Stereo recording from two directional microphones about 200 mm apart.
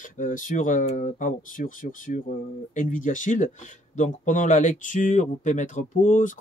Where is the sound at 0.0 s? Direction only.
40° left (ahead or behind).